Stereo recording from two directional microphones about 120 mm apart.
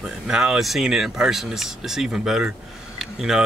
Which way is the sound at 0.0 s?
Centre (ahead or behind).